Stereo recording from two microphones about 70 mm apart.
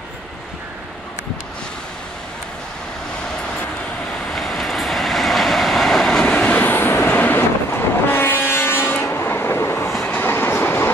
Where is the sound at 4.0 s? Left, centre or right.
Centre; by 9.9 s left.